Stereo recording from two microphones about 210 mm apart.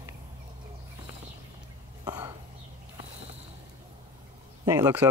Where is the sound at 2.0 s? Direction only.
20° right (ahead or behind).